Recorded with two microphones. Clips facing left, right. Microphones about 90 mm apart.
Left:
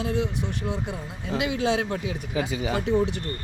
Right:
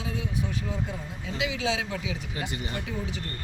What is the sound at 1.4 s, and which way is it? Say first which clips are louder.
Speech: left 4 dB; 50° left (ahead or behind).